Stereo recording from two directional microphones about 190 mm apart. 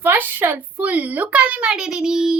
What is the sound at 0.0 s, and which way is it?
A woman's voice, 10° right (ahead or behind).